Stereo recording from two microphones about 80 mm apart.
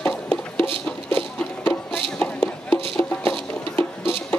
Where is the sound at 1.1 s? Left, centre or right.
Left.